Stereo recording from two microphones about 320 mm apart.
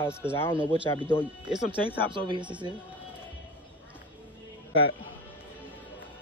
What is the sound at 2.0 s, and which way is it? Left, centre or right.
Speech, centre.